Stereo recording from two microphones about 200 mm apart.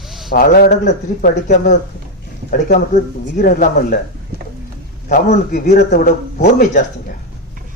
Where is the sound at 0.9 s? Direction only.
40° left (ahead or behind).